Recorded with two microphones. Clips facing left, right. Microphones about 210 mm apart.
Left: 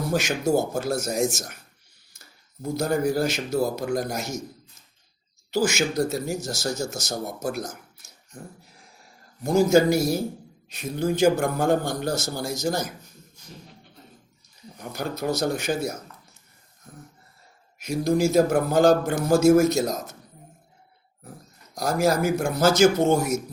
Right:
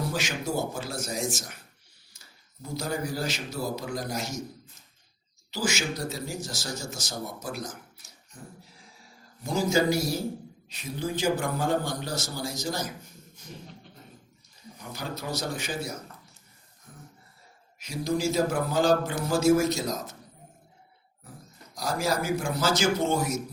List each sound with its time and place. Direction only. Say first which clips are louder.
0.1 s speech: left 8 dB; 45° left (ahead or behind)
5.5 s speech: left 7 dB; 50° left (ahead or behind)
9.4 s speech: left 7 dB; 50° left (ahead or behind)
14.8 s speech: left 7 dB; 55° left (ahead or behind)
17.8 s speech: left 6 dB; 50° left (ahead or behind)
21.8 s speech: left 6 dB; 50° left (ahead or behind)